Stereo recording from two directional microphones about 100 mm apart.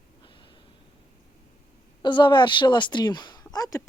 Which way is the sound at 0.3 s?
55° left (ahead or behind).